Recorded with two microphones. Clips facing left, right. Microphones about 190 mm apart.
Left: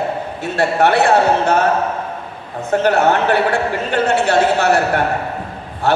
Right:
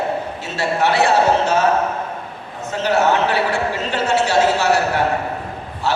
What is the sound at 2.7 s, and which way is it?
A man's voice, 55° left (ahead or behind).